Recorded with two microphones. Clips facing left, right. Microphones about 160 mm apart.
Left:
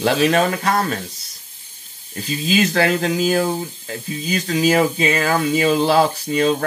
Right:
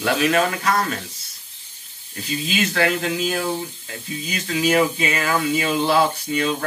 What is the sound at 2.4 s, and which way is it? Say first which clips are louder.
Speech: left 4 dB; 40° left (ahead or behind).